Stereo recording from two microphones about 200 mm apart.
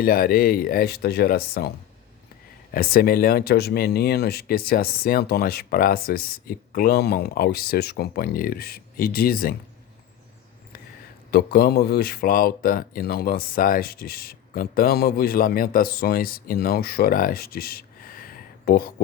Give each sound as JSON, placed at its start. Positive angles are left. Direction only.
{"t": 0.0, "sound": "speech", "side_deg": 45}
{"t": 2.7, "sound": "speech", "side_deg": 50}
{"t": 11.3, "sound": "speech", "side_deg": 50}